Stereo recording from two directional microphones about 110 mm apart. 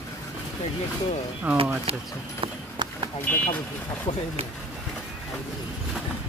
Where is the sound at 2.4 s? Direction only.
45° right (ahead or behind).